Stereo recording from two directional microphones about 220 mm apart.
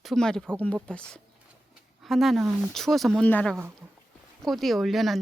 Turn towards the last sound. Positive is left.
turn(degrees=0)  # may be behind; listen again after turning